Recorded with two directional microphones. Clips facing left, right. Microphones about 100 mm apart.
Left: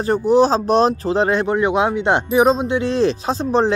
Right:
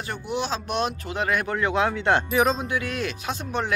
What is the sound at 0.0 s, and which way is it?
Speech, 35° left (ahead or behind).